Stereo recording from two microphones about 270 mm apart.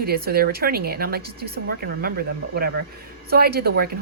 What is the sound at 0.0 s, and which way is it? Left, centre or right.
Speech, right.